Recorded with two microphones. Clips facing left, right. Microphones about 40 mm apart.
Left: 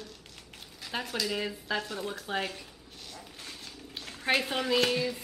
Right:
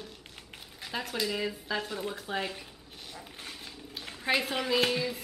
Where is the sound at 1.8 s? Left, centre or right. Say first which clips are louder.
Even; centre.